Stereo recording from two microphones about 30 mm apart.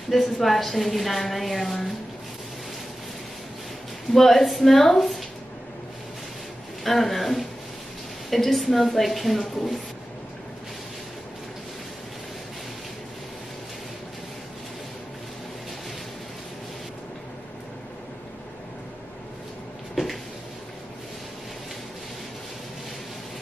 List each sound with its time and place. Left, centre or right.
0.1 s a woman's voice: centre
4.1 s speech: centre
6.8 s a woman's voice: centre
9.4 s speech: centre